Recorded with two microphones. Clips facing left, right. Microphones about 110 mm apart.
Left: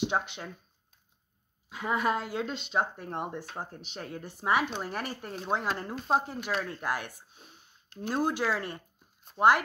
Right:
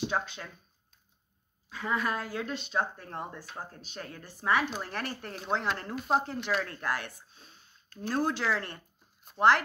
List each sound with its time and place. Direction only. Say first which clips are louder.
0.0 s speech: left 2 dB; 20° left (ahead or behind)
1.7 s speech: left 3 dB; 15° left (ahead or behind); by 6.2 s centre (ahead or behind)
6.2 s speech: right 1 dB; 10° left (ahead or behind)